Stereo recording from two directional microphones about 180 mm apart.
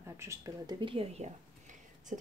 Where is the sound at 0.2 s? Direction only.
20° right (ahead or behind).